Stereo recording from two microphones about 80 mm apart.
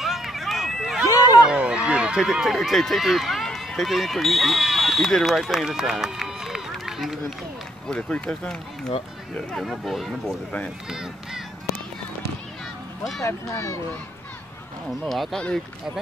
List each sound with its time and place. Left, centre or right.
0.0 s run: centre
1.5 s speech: centre
7.9 s speech: centre
13.2 s speech: left
14.9 s speech: centre
15.3 s speech: centre